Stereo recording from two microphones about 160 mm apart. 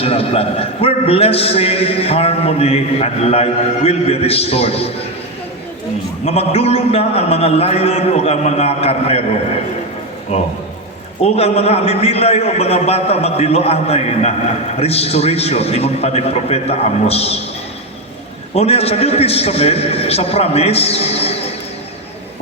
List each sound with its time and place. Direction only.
0.0 s a man's voice: 35° left (ahead or behind)
6.2 s a man's voice: 40° left (ahead or behind)
10.3 s a man's voice: 40° left (ahead or behind)
18.5 s a man's voice: 40° left (ahead or behind)